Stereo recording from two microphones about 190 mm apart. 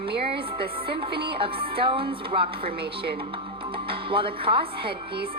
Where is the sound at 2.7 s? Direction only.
55° right (ahead or behind).